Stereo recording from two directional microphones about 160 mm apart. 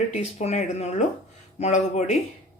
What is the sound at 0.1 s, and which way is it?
Speech, 45° left (ahead or behind).